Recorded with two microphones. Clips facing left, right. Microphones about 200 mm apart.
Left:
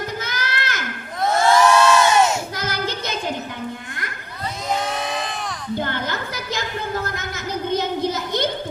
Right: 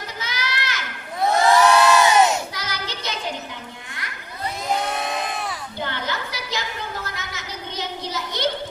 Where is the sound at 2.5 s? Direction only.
50° left (ahead or behind).